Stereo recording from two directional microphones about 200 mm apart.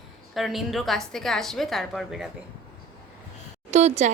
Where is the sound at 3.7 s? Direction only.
35° right (ahead or behind).